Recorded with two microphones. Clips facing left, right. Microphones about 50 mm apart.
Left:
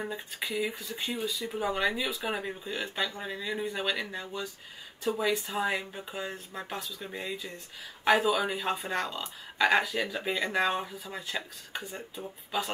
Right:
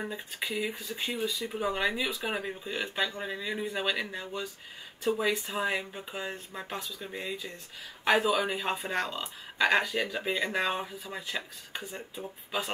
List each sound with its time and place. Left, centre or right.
0.0 s speech: centre